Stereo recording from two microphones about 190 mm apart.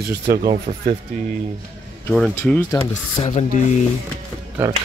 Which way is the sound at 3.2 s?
40° left (ahead or behind).